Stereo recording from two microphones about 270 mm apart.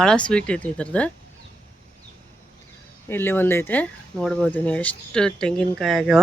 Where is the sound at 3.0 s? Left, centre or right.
Centre.